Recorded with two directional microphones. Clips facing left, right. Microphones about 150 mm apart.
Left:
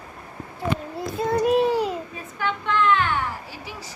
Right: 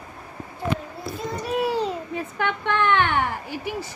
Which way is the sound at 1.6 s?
20° left (ahead or behind).